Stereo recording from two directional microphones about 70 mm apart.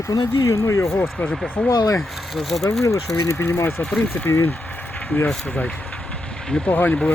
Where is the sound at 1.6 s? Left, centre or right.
Centre.